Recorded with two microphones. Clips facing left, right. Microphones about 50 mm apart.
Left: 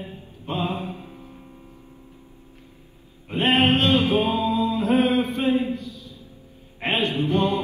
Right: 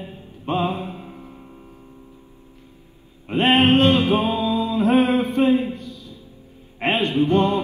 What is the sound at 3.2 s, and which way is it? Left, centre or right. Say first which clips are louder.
Music: right 3 dB; right.